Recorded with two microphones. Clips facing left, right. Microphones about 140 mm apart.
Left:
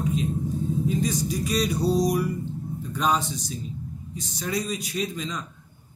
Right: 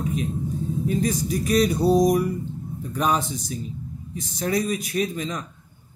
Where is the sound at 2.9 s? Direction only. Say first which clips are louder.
Right 2 dB; 55° right (ahead or behind).